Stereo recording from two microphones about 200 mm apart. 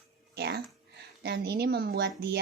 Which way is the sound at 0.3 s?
55° right (ahead or behind).